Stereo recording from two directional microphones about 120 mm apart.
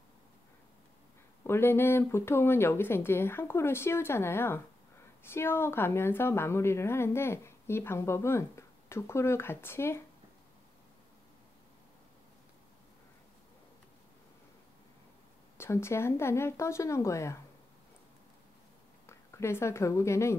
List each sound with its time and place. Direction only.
1.4 s a woman's voice: 20° left (ahead or behind)
15.5 s a woman's voice: 20° left (ahead or behind)
19.0 s speech: 20° left (ahead or behind)